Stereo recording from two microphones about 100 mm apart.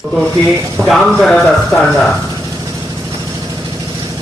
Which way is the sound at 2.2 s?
30° right (ahead or behind).